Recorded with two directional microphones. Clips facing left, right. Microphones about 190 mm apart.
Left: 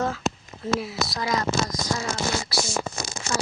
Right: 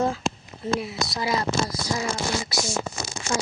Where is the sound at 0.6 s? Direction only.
Centre (ahead or behind).